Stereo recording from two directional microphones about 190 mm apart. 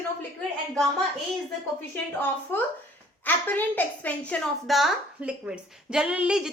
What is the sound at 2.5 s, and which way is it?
A woman's voice, 10° left (ahead or behind).